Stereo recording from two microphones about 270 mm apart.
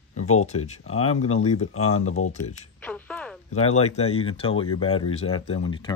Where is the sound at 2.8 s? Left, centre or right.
Centre.